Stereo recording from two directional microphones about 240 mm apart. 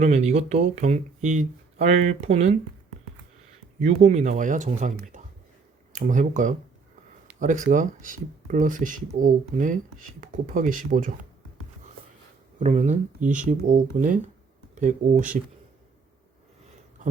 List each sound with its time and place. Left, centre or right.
0.0 s speech: right
3.8 s speech: right
12.5 s speech: right